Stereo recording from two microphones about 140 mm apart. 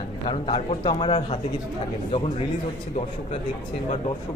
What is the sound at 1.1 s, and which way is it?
Speech, 45° left (ahead or behind).